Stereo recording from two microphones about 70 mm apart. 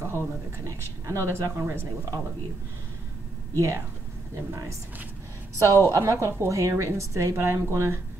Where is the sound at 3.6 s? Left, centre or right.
Right.